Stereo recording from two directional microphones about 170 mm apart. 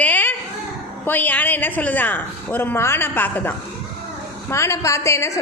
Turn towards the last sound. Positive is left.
turn(degrees=15)  # may be behind; listen again after turning